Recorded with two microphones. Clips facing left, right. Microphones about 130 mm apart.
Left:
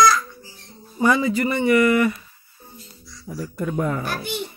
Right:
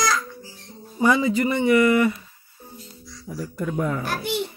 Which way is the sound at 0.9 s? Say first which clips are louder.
Even; 15° right (ahead or behind).